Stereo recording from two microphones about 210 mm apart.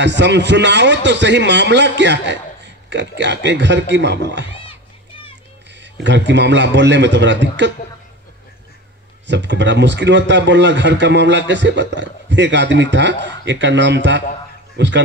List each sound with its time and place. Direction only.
0.0 s speech: 55° right (ahead or behind)
5.8 s speech: 60° right (ahead or behind)
9.3 s speech: 60° right (ahead or behind)